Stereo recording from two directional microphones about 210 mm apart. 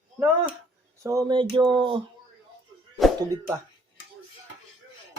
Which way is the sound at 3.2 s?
15° right (ahead or behind).